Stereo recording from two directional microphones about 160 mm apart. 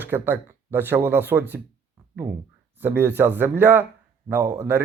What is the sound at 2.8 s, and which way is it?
A man's voice, 15° right (ahead or behind).